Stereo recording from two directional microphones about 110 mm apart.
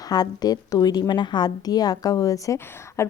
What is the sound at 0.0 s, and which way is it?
A woman's voice, 35° left (ahead or behind).